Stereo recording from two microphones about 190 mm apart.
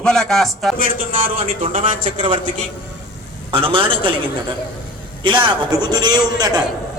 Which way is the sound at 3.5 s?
30° right (ahead or behind).